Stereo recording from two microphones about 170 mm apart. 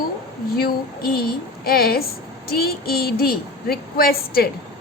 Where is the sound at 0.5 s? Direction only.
60° left (ahead or behind).